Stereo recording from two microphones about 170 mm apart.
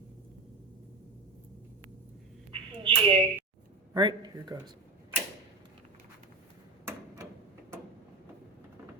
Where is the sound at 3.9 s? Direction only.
25° right (ahead or behind).